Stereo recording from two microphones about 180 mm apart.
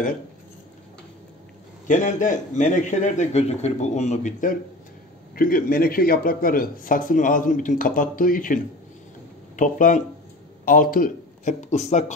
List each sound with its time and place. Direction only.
1.9 s speech: 45° left (ahead or behind)